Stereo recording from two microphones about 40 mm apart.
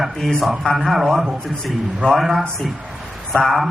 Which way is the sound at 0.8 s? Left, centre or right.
Centre.